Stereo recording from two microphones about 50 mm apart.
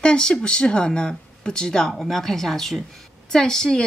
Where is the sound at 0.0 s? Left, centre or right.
Centre.